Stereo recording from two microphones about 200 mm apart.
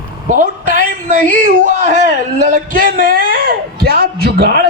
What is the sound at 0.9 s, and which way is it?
Speech, 40° right (ahead or behind).